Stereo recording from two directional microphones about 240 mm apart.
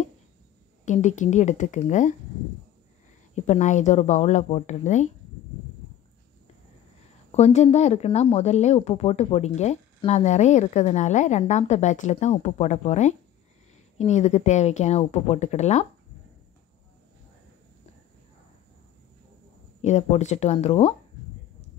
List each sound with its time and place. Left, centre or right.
0.8 s a woman's voice: left
3.4 s a woman's voice: left
7.3 s a woman's voice: left
19.8 s a woman's voice: left